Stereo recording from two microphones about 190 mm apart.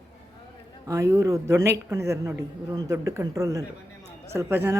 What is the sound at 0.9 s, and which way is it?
A woman's voice, 15° right (ahead or behind).